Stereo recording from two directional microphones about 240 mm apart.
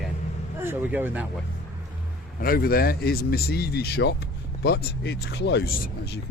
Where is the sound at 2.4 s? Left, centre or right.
Left.